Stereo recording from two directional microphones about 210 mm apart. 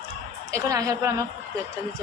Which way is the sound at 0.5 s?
15° right (ahead or behind).